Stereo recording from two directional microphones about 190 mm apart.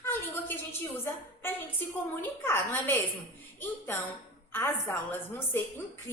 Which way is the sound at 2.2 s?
10° left (ahead or behind).